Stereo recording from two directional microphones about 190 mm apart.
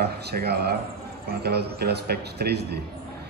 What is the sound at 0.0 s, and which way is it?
Speech, 55° right (ahead or behind).